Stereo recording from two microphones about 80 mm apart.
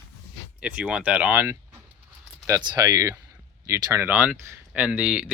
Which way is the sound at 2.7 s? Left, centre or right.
Right.